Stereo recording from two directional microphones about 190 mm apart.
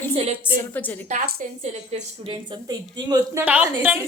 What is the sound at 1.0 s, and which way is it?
A woman's voice, 40° right (ahead or behind).